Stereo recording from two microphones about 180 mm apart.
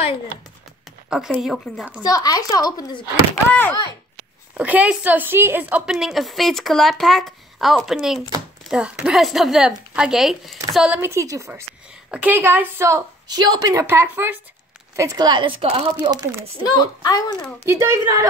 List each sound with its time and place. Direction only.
0.8 s a woman's voice: centre (ahead or behind)
2.0 s speech: 20° left (ahead or behind)
3.5 s speech: 10° left (ahead or behind)
4.6 s a woman's voice: 5° right (ahead or behind)
11.0 s a woman's voice: 15° right (ahead or behind)
16.7 s speech: 20° left (ahead or behind)
17.6 s a woman's voice: 15° right (ahead or behind)